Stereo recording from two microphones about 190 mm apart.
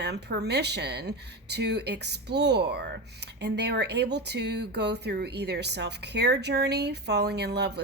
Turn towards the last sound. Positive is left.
turn(degrees=-60)  # may be behind; listen again after turning